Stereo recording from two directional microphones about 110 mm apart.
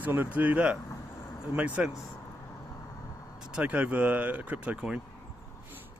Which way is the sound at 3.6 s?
15° right (ahead or behind).